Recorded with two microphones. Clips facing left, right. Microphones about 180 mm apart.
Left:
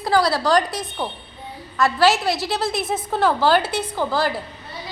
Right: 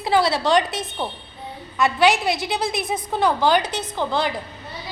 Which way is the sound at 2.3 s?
Centre (ahead or behind).